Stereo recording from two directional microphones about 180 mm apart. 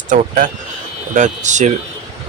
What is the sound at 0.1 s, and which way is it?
Speech, 45° right (ahead or behind).